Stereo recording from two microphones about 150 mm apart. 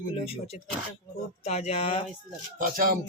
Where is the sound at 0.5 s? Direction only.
50° left (ahead or behind).